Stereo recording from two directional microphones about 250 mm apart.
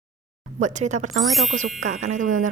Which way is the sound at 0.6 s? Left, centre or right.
Right.